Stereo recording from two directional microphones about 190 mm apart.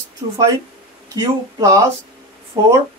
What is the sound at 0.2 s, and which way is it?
Speech, 25° right (ahead or behind).